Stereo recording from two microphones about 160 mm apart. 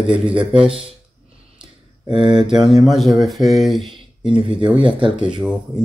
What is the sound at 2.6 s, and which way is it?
Speech, centre (ahead or behind).